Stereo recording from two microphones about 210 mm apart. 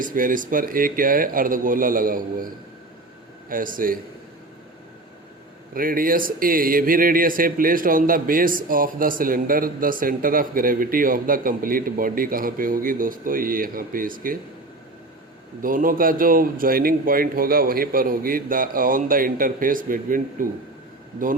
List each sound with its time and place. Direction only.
0.0 s speech: 40° right (ahead or behind)
3.5 s speech: 40° right (ahead or behind)
5.7 s speech: 40° right (ahead or behind)
15.6 s speech: 40° right (ahead or behind)